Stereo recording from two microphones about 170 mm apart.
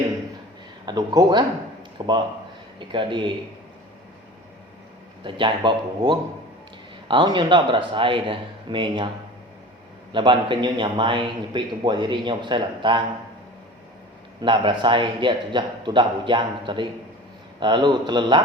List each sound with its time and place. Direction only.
0.9 s a man's voice: 25° right (ahead or behind)
5.2 s a man's voice: 30° right (ahead or behind)
10.1 s a man's voice: 30° right (ahead or behind)
14.4 s a man's voice: 30° right (ahead or behind)